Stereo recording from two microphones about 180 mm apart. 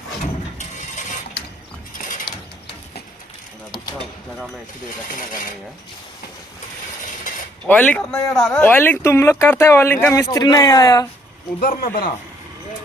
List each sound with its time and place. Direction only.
2.0 s pulleys: 45° left (ahead or behind)
7.7 s speech: 10° left (ahead or behind)
11.6 s speech: 55° left (ahead or behind)